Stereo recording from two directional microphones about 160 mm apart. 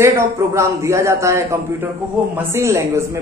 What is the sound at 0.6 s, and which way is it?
A man's voice, 20° right (ahead or behind).